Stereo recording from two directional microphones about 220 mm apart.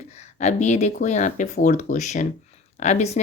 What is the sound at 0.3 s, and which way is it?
A woman's voice, 35° left (ahead or behind).